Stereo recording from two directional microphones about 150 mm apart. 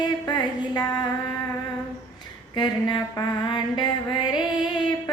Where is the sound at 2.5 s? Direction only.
30° left (ahead or behind).